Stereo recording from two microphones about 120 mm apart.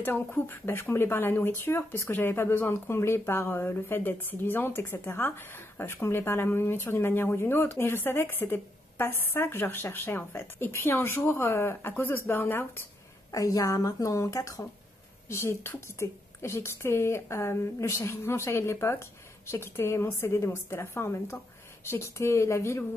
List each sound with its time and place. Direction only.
0.0 s speech: 15° left (ahead or behind)
13.3 s speech: 30° left (ahead or behind)